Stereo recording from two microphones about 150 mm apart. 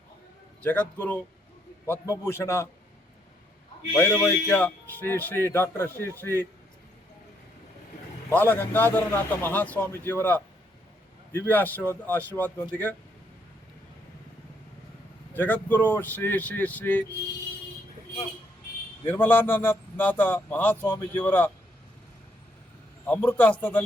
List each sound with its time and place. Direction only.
0.6 s speech: 10° left (ahead or behind)
3.9 s speech: 15° left (ahead or behind)
8.3 s speech: 15° left (ahead or behind)
15.3 s speech: 10° left (ahead or behind)
19.0 s speech: 15° left (ahead or behind)
23.0 s speech: 10° left (ahead or behind)